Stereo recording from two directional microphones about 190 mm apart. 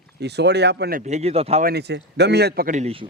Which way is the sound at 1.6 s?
55° right (ahead or behind).